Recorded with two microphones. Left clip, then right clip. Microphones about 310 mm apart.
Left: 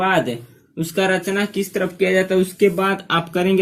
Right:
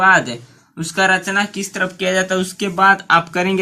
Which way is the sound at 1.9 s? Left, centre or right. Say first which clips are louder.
Left 2 dB; right.